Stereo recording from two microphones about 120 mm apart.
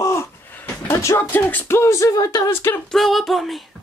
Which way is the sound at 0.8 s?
20° left (ahead or behind).